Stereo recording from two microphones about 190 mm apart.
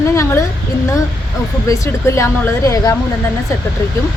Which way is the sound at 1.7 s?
15° left (ahead or behind).